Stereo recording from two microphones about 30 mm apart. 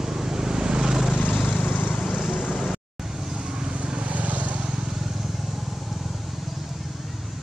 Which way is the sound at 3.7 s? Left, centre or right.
Right.